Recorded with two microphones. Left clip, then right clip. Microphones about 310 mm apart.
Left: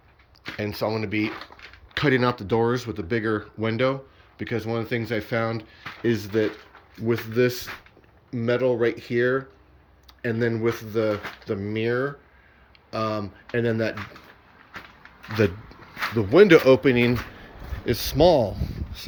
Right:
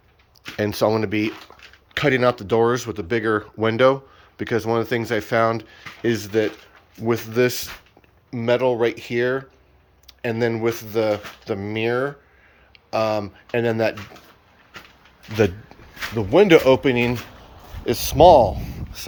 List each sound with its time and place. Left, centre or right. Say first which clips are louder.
0.5 s speech: right 7 dB; right
15.4 s speech: right 3 dB; centre